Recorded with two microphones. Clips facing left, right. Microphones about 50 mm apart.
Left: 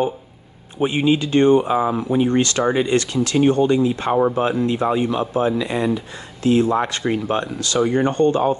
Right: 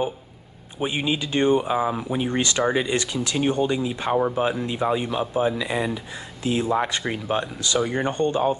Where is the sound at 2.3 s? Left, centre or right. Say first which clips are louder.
Left 4 dB; centre.